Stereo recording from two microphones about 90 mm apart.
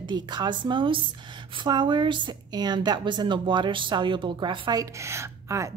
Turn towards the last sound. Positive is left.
turn(degrees=-35)  # may be behind; listen again after turning